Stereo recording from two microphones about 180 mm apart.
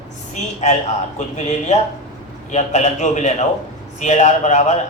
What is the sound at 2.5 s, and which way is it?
Speech, 40° left (ahead or behind).